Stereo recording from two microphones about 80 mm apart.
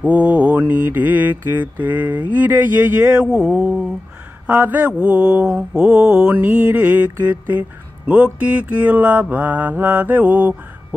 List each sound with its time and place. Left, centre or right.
0.0 s mantra: centre